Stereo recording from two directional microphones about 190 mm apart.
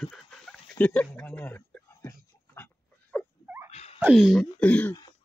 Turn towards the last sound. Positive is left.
turn(degrees=10)  # may be behind; listen again after turning